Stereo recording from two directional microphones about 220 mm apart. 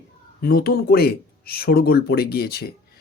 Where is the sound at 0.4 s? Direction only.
45° left (ahead or behind).